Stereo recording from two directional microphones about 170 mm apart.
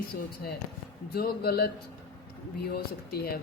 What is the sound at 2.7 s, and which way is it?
Speech, 65° left (ahead or behind).